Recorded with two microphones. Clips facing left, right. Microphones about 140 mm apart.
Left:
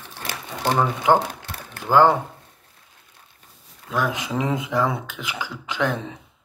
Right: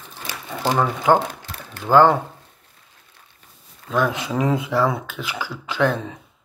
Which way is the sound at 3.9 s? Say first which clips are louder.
Right 3 dB; 15° left (ahead or behind).